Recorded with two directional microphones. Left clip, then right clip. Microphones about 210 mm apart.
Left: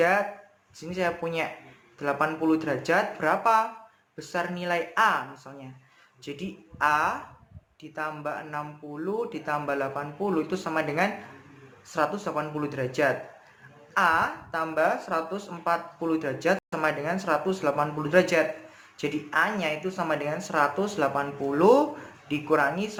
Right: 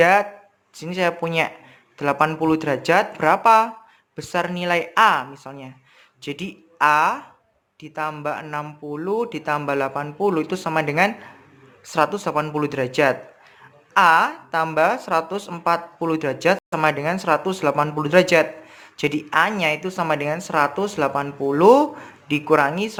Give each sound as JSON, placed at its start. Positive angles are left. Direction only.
{"t": 0.0, "sound": "a woman's voice", "side_deg": -40}